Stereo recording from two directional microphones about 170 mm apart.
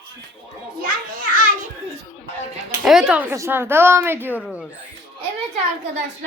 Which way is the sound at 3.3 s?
15° right (ahead or behind).